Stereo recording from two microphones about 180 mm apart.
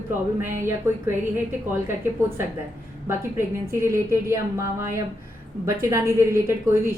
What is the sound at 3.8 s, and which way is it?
A woman's voice, 15° right (ahead or behind).